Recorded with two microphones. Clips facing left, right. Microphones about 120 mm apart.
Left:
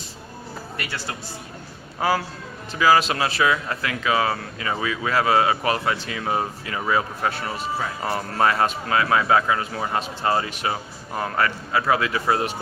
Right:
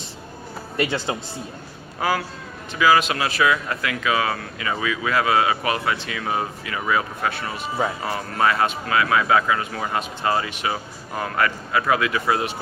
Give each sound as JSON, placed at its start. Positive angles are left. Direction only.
{"t": 0.8, "sound": "speech", "side_deg": -20}
{"t": 2.0, "sound": "a man's voice", "side_deg": 30}